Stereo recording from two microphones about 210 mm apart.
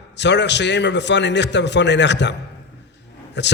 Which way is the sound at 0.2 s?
55° left (ahead or behind).